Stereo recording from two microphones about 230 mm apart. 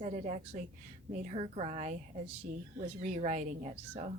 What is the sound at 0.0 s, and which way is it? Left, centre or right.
A woman's voice, right.